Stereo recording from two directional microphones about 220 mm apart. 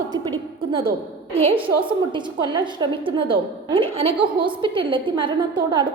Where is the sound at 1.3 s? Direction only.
25° right (ahead or behind).